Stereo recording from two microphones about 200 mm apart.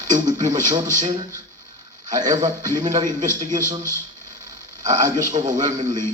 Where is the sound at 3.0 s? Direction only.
40° right (ahead or behind).